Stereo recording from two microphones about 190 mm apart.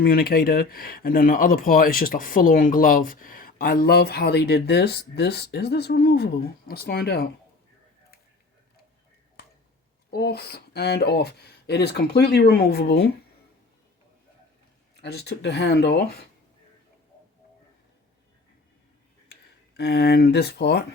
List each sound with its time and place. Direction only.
0.0 s speech: 55° left (ahead or behind)
10.1 s speech: 55° left (ahead or behind)
15.0 s speech: 60° left (ahead or behind)
19.3 s speech: 60° left (ahead or behind)